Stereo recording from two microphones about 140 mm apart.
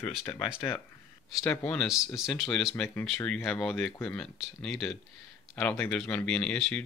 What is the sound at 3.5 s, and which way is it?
Speech, 5° left (ahead or behind).